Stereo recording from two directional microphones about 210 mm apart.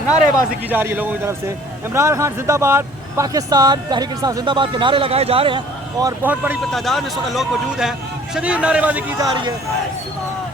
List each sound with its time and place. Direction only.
0.7 s speech: 10° right (ahead or behind)
9.3 s speech: 20° right (ahead or behind)